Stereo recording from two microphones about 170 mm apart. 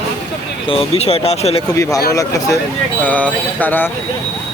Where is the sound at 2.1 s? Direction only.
20° left (ahead or behind).